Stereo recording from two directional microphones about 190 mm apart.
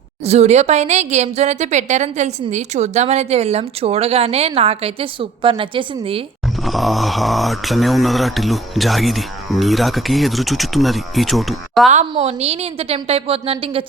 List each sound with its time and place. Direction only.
0.3 s a woman's voice: 35° right (ahead or behind)
6.7 s speech: centre (ahead or behind)
11.9 s a woman's voice: 35° right (ahead or behind)